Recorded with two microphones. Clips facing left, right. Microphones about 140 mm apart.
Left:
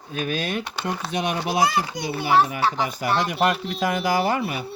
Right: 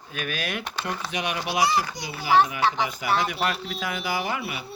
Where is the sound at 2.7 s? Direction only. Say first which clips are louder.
Left 2 dB; 40° left (ahead or behind).